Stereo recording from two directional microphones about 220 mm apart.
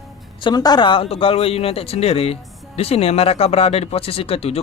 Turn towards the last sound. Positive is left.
turn(degrees=25)  # may be behind; listen again after turning